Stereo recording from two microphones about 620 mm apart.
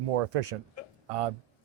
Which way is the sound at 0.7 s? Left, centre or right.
Right.